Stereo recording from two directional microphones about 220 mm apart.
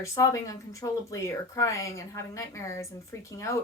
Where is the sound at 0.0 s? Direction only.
15° left (ahead or behind).